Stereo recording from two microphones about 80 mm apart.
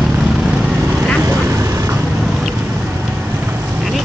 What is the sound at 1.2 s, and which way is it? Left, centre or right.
Vehicle, right.